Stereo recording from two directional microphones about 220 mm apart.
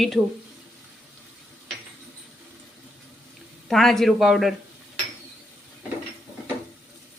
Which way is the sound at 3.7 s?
Centre (ahead or behind).